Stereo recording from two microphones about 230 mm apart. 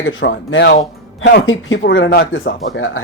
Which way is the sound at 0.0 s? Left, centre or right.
Left.